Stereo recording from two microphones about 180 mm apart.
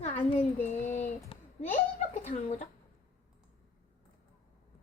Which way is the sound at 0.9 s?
40° left (ahead or behind).